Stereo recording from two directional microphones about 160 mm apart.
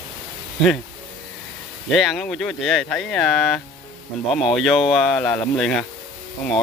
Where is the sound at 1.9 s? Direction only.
Centre (ahead or behind).